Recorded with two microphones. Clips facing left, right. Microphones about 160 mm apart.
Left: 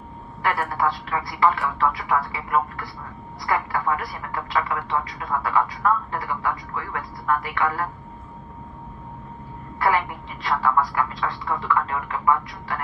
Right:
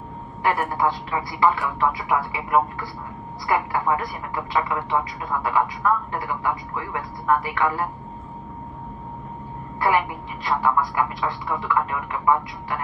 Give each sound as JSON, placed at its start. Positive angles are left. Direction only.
{"t": 0.4, "sound": "speech", "side_deg": -20}
{"t": 9.8, "sound": "speech", "side_deg": -20}